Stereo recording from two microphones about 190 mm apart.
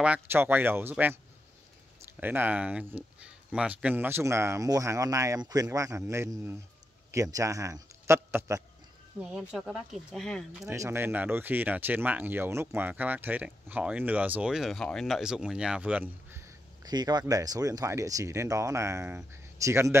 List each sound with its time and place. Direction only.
0.0 s speech: 10° right (ahead or behind)
2.1 s speech: 10° right (ahead or behind)
10.6 s speech: 15° right (ahead or behind)